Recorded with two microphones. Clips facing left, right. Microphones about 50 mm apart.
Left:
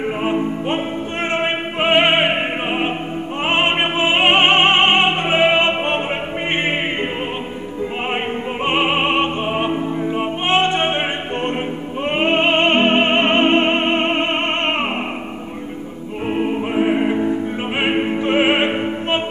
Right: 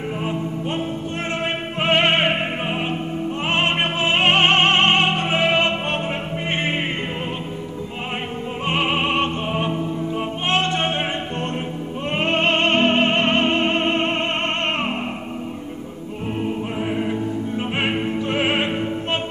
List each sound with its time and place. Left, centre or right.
0.0 s music: left
1.3 s a sound: left
1.9 s opera: centre
2.7 s opera: left
3.4 s music: left
8.6 s music: left
16.3 s music: left
17.7 s opera: left